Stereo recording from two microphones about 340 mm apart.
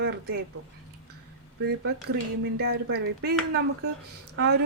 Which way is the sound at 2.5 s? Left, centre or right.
Right.